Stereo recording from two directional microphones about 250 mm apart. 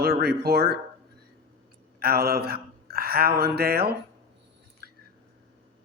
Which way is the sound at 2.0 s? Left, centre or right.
Right.